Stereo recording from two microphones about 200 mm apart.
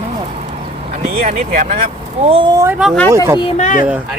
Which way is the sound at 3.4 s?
30° left (ahead or behind).